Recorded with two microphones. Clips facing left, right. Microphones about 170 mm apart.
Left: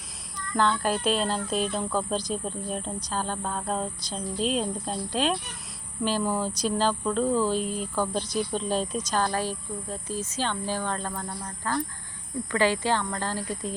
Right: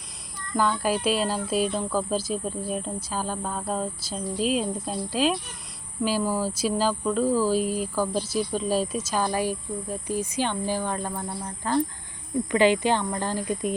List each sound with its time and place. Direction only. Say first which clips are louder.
0.3 s speech: even; 10° right (ahead or behind)